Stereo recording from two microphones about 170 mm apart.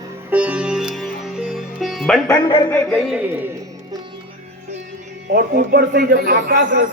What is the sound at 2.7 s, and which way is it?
Speech, 10° left (ahead or behind).